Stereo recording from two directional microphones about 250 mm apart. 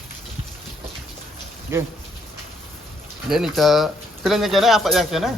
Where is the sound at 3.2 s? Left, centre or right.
Centre.